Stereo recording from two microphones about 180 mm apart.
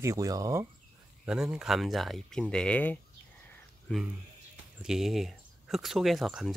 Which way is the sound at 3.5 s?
Centre (ahead or behind).